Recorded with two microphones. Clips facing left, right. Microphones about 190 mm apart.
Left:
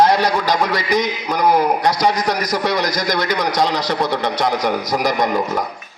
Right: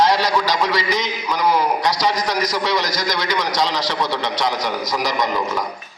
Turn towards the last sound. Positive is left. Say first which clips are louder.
# left 3 dB
turn(degrees=50)  # may be behind; listen again after turning